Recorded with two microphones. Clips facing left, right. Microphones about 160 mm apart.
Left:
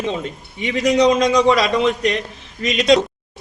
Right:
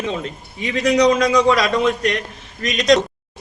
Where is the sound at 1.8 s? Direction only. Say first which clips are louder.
Left 1 dB; 20° left (ahead or behind).